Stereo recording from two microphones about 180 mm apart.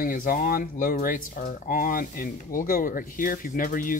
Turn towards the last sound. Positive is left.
turn(degrees=50)  # may be behind; listen again after turning